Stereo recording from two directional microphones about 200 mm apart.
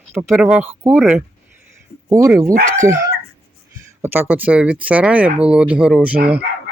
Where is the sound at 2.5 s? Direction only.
40° right (ahead or behind).